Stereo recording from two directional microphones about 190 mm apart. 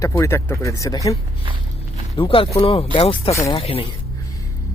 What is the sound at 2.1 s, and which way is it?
Speech, 30° left (ahead or behind).